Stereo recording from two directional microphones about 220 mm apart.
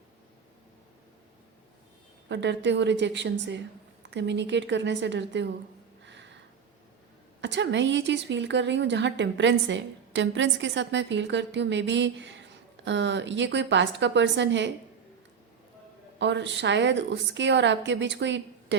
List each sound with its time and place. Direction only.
2.3 s a woman's voice: 55° right (ahead or behind)
7.4 s a woman's voice: 55° right (ahead or behind)
16.1 s a woman's voice: 55° right (ahead or behind)